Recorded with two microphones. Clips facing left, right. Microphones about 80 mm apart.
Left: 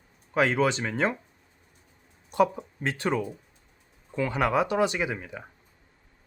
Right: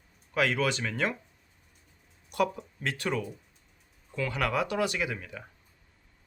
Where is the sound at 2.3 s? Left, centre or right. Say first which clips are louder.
Left 5 dB; left.